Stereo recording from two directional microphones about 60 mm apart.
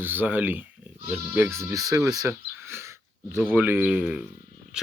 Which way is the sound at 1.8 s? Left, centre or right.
Right.